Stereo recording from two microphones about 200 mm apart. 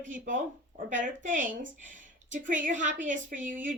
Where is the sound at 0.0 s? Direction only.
40° right (ahead or behind).